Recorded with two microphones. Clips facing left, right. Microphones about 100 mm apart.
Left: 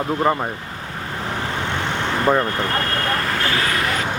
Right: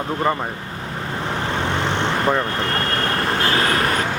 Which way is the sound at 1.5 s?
30° right (ahead or behind).